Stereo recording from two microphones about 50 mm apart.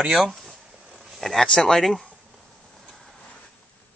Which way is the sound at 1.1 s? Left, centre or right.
Centre.